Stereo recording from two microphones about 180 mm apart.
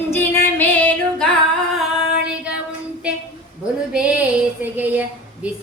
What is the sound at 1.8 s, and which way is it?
Child singing, 5° right (ahead or behind).